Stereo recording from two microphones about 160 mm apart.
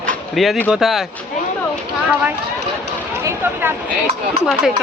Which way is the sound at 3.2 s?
15° right (ahead or behind).